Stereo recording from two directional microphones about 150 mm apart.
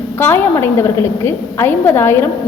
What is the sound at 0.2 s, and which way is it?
A woman's voice, 15° left (ahead or behind).